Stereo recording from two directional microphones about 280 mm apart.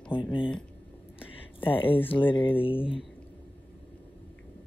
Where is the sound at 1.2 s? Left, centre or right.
Centre.